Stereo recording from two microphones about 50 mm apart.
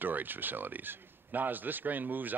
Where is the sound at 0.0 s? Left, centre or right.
Right.